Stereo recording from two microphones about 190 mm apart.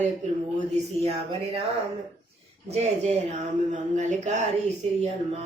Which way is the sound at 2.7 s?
35° right (ahead or behind).